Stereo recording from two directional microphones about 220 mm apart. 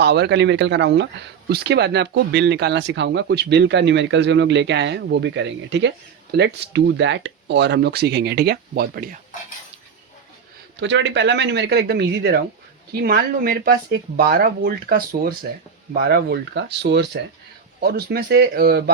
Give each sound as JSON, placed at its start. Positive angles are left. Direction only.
{"t": 0.0, "sound": "speech", "side_deg": -50}
{"t": 10.8, "sound": "speech", "side_deg": -55}